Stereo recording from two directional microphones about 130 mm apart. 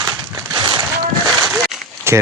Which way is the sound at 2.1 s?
20° right (ahead or behind).